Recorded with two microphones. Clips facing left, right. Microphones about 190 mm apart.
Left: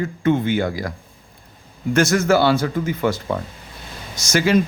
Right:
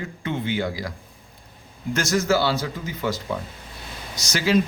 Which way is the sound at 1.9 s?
55° left (ahead or behind).